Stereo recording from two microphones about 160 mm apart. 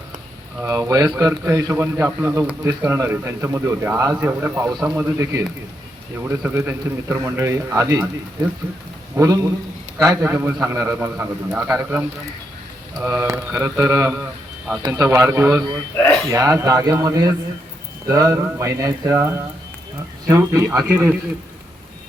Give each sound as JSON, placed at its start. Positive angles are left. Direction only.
{"t": 0.6, "sound": "speech", "side_deg": -20}
{"t": 9.1, "sound": "speech", "side_deg": -20}
{"t": 16.0, "sound": "speech", "side_deg": 10}
{"t": 16.3, "sound": "speech", "side_deg": -20}